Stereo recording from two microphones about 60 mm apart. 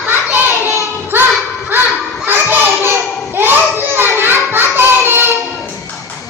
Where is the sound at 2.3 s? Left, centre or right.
Right.